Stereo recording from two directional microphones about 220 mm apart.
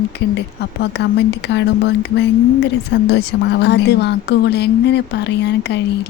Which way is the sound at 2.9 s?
50° left (ahead or behind).